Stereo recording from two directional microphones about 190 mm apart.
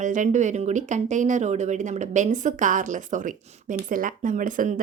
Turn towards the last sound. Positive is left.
turn(degrees=-45)  # may be behind; listen again after turning